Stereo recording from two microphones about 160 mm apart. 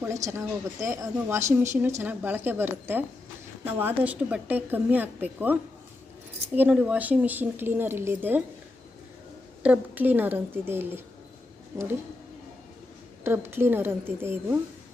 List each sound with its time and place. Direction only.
0.0 s a woman's voice: 20° right (ahead or behind)
9.6 s speech: 10° right (ahead or behind)
13.2 s speech: 15° right (ahead or behind)